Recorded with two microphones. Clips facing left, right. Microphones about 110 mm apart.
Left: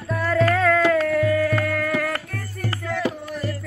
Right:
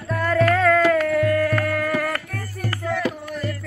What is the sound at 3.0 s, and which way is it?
Music, 25° left (ahead or behind).